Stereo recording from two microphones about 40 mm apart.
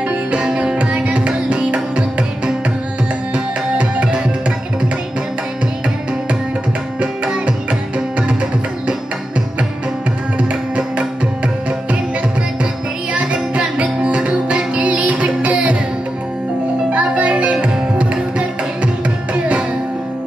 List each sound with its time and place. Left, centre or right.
0.4 s music: right
1.0 s music: right
3.3 s tabla: right
11.0 s tabla: right
13.1 s music: right
16.9 s music: right